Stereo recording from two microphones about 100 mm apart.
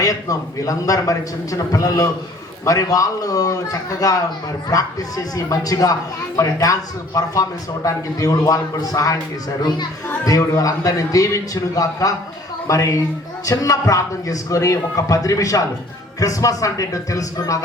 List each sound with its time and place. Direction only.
0.0 s speech: 35° left (ahead or behind)
10.2 s speech: 35° left (ahead or behind)